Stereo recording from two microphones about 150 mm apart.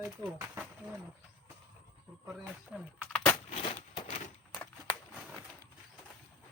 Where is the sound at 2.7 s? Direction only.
10° right (ahead or behind).